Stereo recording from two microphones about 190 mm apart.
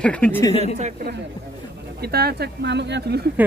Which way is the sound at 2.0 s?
55° right (ahead or behind).